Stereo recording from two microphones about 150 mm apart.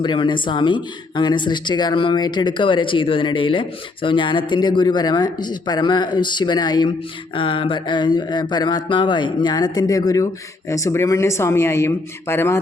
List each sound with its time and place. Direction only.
0.0 s speech: 30° left (ahead or behind); by 12.5 s 15° left (ahead or behind)